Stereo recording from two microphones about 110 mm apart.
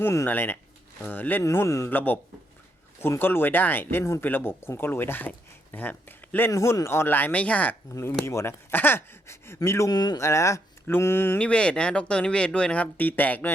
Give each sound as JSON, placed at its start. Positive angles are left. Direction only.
{"t": 0.0, "sound": "speech", "side_deg": 30}
{"t": 0.3, "sound": "speech", "side_deg": 15}
{"t": 1.5, "sound": "speech", "side_deg": 30}
{"t": 8.2, "sound": "speech", "side_deg": 25}
{"t": 9.9, "sound": "speech", "side_deg": 35}
{"t": 10.2, "sound": "speech", "side_deg": 25}
{"t": 11.3, "sound": "speech", "side_deg": 10}